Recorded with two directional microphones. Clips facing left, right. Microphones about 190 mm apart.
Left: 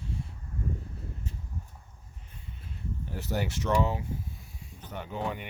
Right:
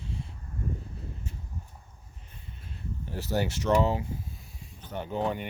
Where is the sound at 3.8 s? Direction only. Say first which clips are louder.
Right 3 dB; 30° right (ahead or behind).